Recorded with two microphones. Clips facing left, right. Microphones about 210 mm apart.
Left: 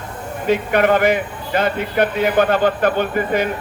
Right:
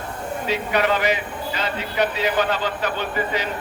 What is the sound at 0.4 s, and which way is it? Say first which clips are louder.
Speech: left 6 dB; 55° left (ahead or behind).